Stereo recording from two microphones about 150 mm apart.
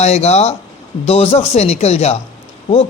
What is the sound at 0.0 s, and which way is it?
A man's voice, 45° left (ahead or behind).